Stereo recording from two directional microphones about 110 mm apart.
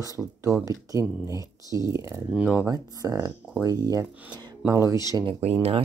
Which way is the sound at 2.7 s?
30° right (ahead or behind).